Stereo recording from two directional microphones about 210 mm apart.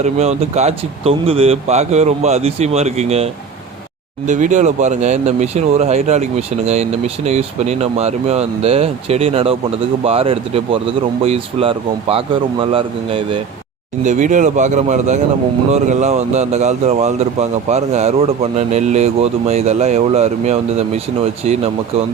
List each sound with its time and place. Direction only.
0.0 s speech: 30° right (ahead or behind)
4.3 s speech: 35° right (ahead or behind)
14.0 s speech: 35° right (ahead or behind)